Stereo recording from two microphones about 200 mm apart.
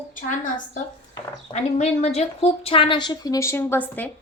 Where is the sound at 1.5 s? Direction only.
35° left (ahead or behind).